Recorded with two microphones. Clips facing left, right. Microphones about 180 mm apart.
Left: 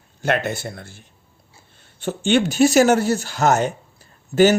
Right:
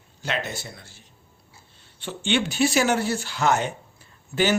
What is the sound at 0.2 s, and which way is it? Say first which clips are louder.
Speech: left 8 dB; 55° left (ahead or behind).